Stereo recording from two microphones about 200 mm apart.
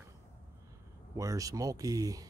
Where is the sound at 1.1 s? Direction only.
15° right (ahead or behind).